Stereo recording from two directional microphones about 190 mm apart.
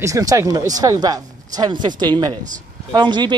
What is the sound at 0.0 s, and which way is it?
A woman's voice, 20° right (ahead or behind).